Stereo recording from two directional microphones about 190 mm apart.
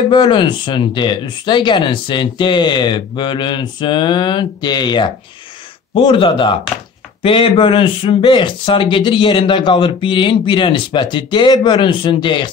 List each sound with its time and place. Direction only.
0.1 s a man's voice: 25° left (ahead or behind)